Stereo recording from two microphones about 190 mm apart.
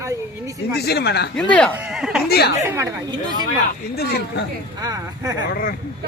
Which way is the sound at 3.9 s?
55° left (ahead or behind).